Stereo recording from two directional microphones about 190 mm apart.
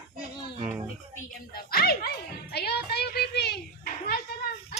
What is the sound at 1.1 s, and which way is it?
Speech, 50° left (ahead or behind).